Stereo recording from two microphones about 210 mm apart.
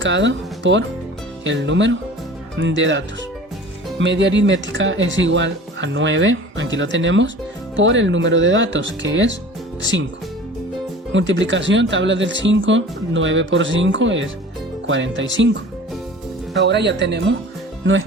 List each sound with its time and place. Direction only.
0.0 s speech: 60° right (ahead or behind)
11.1 s speech: 60° right (ahead or behind)
16.6 s speech: 55° right (ahead or behind)